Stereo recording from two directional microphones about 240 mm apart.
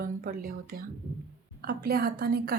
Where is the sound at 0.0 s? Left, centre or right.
Right.